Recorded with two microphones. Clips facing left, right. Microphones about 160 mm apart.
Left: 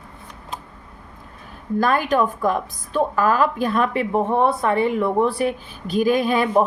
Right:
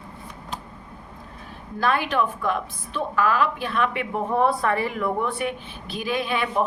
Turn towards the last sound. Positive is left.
turn(degrees=40)  # may be behind; listen again after turning